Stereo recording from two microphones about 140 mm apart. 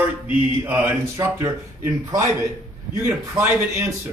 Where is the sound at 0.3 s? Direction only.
15° right (ahead or behind).